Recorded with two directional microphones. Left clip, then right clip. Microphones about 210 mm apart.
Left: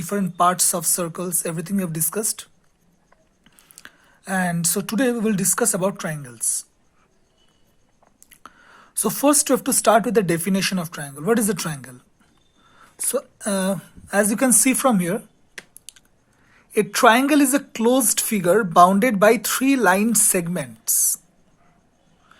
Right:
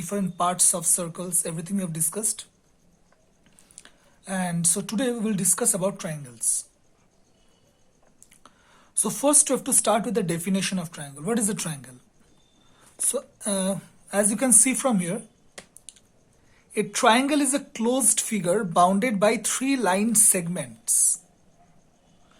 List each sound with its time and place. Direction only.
0.0 s speech: 25° left (ahead or behind)
8.2 s speech: 25° left (ahead or behind)
13.0 s speech: 25° left (ahead or behind)
15.9 s a sound: 25° left (ahead or behind)
16.7 s speech: 25° left (ahead or behind)